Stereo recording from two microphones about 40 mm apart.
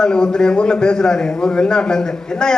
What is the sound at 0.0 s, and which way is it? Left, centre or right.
A man's voice, centre.